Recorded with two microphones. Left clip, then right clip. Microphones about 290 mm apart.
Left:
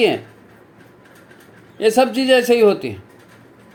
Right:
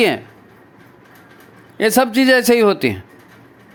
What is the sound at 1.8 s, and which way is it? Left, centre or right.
Speech, right.